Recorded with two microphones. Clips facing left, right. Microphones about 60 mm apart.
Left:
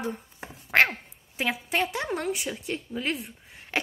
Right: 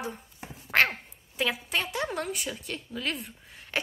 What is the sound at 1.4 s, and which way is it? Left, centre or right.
A woman's voice, left.